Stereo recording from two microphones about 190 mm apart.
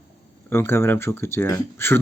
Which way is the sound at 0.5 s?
10° left (ahead or behind).